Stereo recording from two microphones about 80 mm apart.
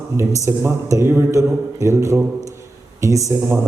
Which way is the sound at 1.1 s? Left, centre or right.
Right.